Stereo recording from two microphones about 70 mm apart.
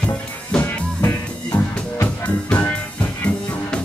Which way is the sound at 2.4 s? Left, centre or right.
Left.